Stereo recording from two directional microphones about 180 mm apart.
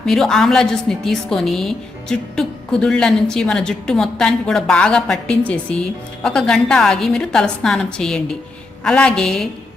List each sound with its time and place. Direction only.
0.0 s a woman's voice: centre (ahead or behind)